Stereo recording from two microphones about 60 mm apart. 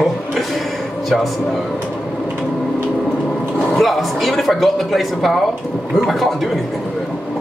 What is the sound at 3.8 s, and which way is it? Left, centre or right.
Speech, centre.